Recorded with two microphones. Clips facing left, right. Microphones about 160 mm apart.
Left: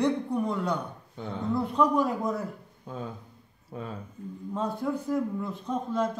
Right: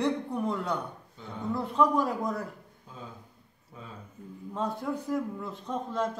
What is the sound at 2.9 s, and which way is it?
Speech, 65° left (ahead or behind).